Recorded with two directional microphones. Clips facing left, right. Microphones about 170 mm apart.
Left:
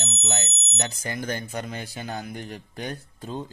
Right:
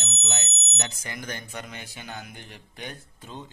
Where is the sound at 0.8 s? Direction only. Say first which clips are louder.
Left 6 dB; 30° left (ahead or behind).